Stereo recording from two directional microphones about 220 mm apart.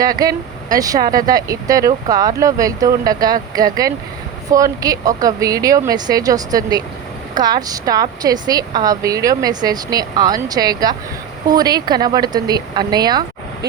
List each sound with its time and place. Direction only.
0.0 s a woman's voice: 15° right (ahead or behind)